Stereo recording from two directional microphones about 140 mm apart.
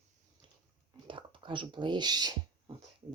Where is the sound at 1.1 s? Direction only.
35° right (ahead or behind).